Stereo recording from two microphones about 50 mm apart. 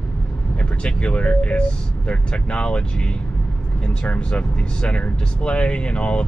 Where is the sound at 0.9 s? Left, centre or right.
Left.